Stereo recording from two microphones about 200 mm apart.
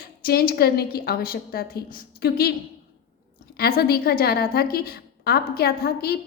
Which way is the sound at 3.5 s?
50° left (ahead or behind).